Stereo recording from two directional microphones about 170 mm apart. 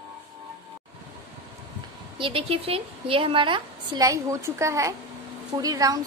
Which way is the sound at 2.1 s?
30° right (ahead or behind).